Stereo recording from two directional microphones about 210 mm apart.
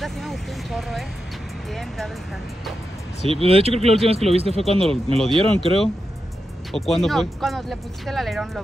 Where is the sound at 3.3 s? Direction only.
25° right (ahead or behind).